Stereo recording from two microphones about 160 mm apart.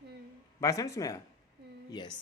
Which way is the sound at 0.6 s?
20° left (ahead or behind).